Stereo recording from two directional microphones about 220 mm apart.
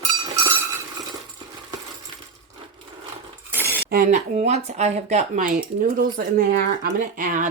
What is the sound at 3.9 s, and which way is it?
Speech, 35° right (ahead or behind).